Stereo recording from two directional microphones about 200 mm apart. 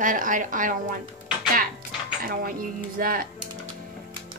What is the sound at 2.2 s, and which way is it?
Speech, 45° right (ahead or behind).